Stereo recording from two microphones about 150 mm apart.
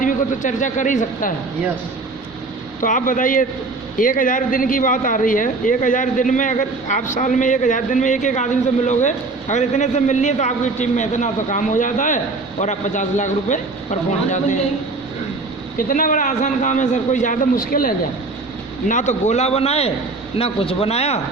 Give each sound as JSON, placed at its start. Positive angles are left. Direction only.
{"t": 0.0, "sound": "a man's voice", "side_deg": 60}
{"t": 2.8, "sound": "a man's voice", "side_deg": 60}
{"t": 15.9, "sound": "a man's voice", "side_deg": 65}
{"t": 18.9, "sound": "a man's voice", "side_deg": 55}